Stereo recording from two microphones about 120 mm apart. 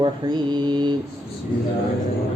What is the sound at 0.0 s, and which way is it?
Mantra, 40° right (ahead or behind).